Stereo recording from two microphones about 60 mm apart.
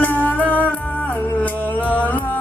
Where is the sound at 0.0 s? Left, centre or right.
Left.